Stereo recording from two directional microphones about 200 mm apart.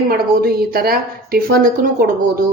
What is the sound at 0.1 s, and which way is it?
A woman's voice, 50° right (ahead or behind).